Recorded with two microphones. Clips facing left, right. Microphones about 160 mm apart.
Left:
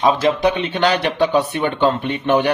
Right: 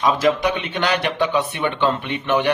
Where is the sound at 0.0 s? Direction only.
30° left (ahead or behind).